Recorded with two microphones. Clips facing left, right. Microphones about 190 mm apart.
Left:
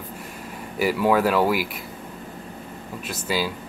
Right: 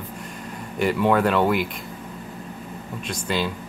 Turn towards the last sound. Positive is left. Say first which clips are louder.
# even
turn(degrees=5)  # may be behind; listen again after turning